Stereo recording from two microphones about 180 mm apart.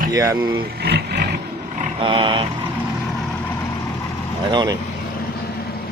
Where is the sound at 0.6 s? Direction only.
65° right (ahead or behind).